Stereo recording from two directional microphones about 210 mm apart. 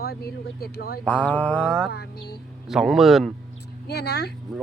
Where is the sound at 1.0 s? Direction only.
5° left (ahead or behind).